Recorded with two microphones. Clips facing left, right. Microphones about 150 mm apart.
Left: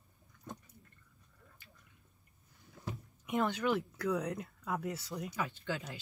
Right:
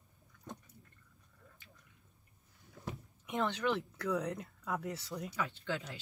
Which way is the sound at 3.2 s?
10° left (ahead or behind).